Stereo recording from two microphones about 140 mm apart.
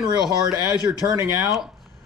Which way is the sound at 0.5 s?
30° left (ahead or behind).